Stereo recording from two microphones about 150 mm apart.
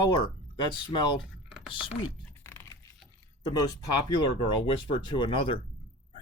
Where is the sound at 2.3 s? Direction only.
15° left (ahead or behind).